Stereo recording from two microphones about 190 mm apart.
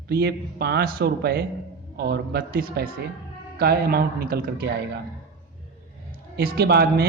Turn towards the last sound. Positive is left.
turn(degrees=-55)  # may be behind; listen again after turning